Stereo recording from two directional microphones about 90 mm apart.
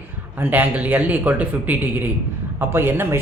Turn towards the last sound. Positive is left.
turn(degrees=-25)  # may be behind; listen again after turning